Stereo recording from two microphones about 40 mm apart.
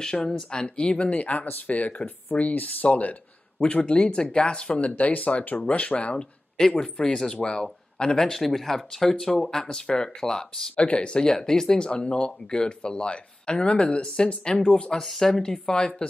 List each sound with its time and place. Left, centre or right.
0.0 s speech: centre; by 3.2 s left
3.7 s speech: left
5.6 s speech: left; by 10.7 s centre
10.8 s speech: left